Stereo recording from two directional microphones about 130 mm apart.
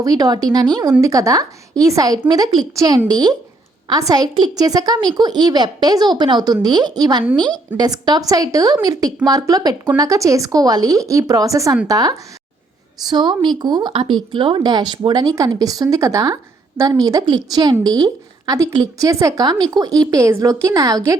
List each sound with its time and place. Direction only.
0.0 s a woman's voice: 30° right (ahead or behind)